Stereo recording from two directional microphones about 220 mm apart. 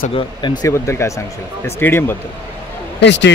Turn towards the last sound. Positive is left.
turn(degrees=55)  # may be behind; listen again after turning